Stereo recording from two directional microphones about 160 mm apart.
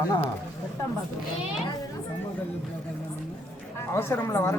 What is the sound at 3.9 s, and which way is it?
Speech, 15° left (ahead or behind).